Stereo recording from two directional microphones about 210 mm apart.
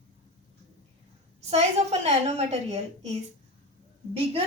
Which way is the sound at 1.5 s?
30° right (ahead or behind).